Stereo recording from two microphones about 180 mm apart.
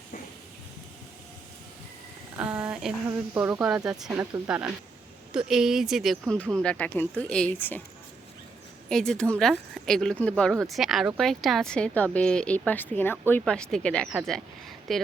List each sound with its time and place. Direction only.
2.4 s a sound: 5° right (ahead or behind)
3.3 s speech: 10° right (ahead or behind); by 7.8 s 10° left (ahead or behind)
8.9 s speech: 5° left (ahead or behind)